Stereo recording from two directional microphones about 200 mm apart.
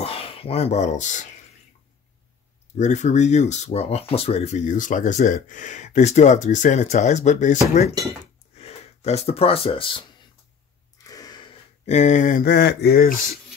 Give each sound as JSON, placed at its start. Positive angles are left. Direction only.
{"t": 0.0, "sound": "speech", "side_deg": 30}
{"t": 2.8, "sound": "speech", "side_deg": 35}
{"t": 8.5, "sound": "speech", "side_deg": 30}
{"t": 11.1, "sound": "a sound", "side_deg": 20}
{"t": 11.8, "sound": "speech", "side_deg": 35}